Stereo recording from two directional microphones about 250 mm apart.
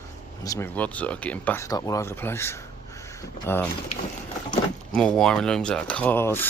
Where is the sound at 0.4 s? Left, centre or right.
Centre.